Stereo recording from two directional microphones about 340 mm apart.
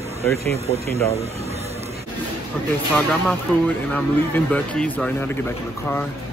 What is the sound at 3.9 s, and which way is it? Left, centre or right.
Speech, centre.